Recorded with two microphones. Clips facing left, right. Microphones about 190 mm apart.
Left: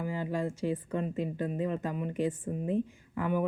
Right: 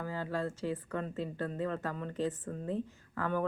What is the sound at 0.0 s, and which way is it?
Speech, 15° left (ahead or behind).